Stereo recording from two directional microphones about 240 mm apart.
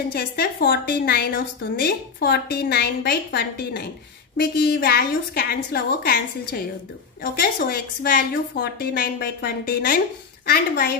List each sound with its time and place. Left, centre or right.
0.1 s a woman's voice: left